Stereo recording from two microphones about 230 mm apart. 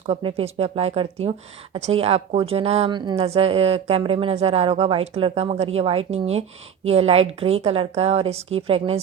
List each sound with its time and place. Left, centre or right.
0.1 s a woman's voice: right